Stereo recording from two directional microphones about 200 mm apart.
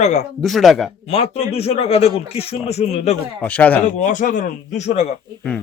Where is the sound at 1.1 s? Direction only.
30° left (ahead or behind).